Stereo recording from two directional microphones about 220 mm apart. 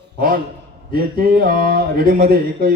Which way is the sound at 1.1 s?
40° right (ahead or behind).